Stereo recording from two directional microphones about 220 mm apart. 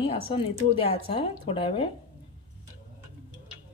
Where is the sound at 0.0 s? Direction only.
25° left (ahead or behind).